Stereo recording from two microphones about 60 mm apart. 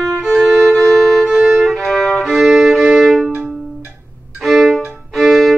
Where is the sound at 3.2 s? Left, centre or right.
Right.